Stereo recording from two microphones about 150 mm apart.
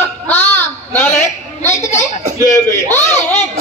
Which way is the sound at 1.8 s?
50° left (ahead or behind).